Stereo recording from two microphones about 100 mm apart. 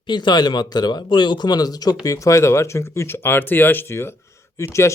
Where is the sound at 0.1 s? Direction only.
50° left (ahead or behind).